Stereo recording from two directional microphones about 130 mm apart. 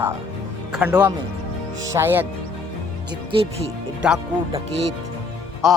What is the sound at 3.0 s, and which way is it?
Speech, 35° right (ahead or behind).